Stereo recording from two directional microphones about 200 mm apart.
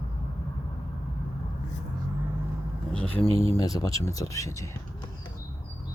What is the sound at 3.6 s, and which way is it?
Speech, 20° left (ahead or behind).